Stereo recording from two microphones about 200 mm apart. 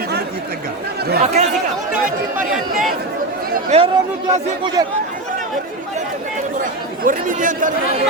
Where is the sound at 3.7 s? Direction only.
30° right (ahead or behind).